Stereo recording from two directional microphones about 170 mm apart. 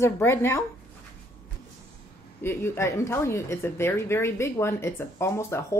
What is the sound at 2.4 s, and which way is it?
Speech, 15° left (ahead or behind).